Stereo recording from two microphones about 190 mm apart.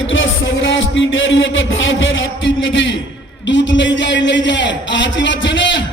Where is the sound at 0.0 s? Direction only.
90° left.